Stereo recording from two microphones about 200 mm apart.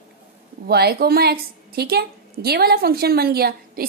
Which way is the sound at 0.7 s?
50° right (ahead or behind).